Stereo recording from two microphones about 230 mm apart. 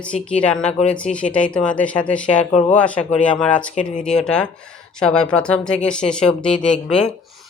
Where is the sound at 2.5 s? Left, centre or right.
Left.